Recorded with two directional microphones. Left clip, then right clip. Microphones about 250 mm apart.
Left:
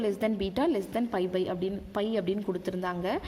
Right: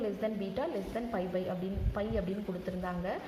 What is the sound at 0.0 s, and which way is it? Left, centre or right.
A woman's voice, left.